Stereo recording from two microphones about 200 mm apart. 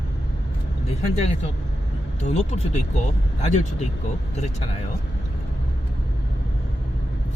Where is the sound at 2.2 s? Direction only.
35° left (ahead or behind).